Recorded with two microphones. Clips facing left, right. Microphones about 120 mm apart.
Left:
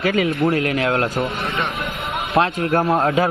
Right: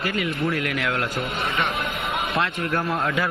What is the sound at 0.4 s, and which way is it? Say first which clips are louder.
Speech: left 6 dB; 35° left (ahead or behind).